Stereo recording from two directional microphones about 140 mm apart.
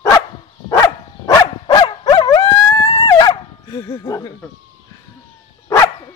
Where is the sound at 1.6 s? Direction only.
30° left (ahead or behind).